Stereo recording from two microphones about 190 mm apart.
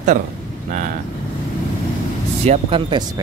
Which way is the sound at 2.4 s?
30° right (ahead or behind).